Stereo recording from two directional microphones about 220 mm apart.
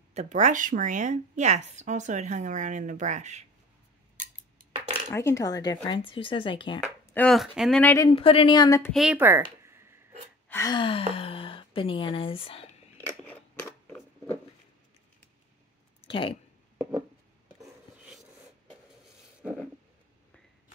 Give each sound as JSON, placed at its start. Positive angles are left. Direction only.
{"t": 0.1, "sound": "a woman's voice", "side_deg": -30}
{"t": 5.1, "sound": "speech", "side_deg": 15}
{"t": 7.2, "sound": "speech", "side_deg": 0}
{"t": 8.1, "sound": "speech", "side_deg": 25}
{"t": 8.9, "sound": "speech", "side_deg": -5}
{"t": 10.5, "sound": "a woman's voice", "side_deg": 15}
{"t": 13.3, "sound": "scissors", "side_deg": 5}
{"t": 16.1, "sound": "speech", "side_deg": 25}
{"t": 17.6, "sound": "filing", "side_deg": -5}